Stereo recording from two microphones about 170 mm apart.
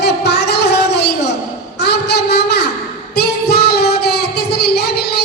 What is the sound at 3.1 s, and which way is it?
Child singing, 70° left (ahead or behind).